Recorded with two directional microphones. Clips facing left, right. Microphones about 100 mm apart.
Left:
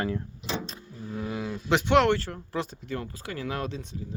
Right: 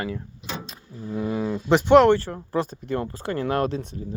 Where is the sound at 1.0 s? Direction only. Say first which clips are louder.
Right 6 dB; 20° right (ahead or behind).